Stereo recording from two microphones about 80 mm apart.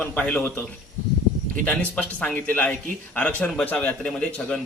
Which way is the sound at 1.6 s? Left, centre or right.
Centre.